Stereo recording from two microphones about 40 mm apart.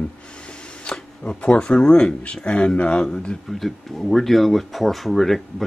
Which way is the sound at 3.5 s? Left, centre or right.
Centre.